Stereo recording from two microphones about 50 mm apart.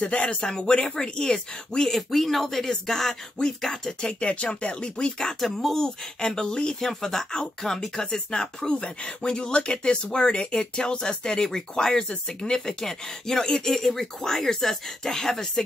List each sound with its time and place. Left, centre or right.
0.0 s speech: left
5.4 s speech: centre
6.2 s speech: centre